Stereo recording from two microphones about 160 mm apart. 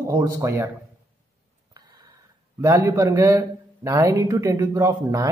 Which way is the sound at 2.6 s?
20° right (ahead or behind).